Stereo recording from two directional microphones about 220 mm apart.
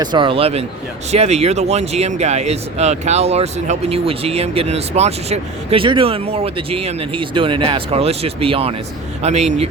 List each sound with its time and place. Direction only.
0.0 s speech: 20° right (ahead or behind)